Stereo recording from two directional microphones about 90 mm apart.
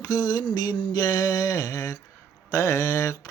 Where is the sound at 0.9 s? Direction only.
45° left (ahead or behind).